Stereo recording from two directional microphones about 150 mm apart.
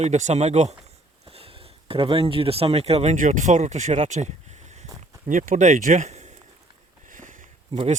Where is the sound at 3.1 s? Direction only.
60° right (ahead or behind).